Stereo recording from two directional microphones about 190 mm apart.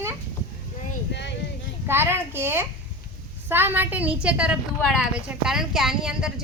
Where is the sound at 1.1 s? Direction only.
65° left (ahead or behind).